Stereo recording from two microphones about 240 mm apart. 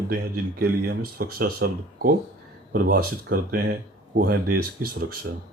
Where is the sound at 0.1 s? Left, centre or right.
Right.